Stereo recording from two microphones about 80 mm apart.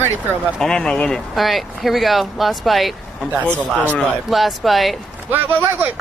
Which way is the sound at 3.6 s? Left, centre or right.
Centre.